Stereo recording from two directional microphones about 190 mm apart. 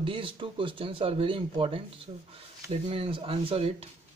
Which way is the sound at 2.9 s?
30° right (ahead or behind).